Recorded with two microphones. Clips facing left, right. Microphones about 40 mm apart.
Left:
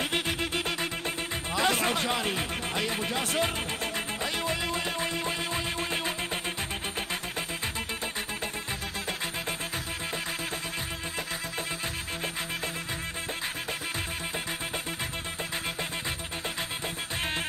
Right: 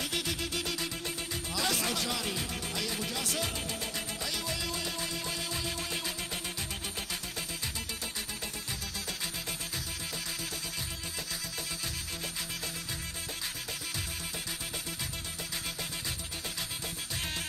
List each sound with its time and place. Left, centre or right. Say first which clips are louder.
0.0 s music: left 5 dB; left